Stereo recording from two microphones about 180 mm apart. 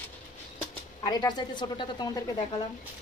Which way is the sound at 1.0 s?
25° left (ahead or behind).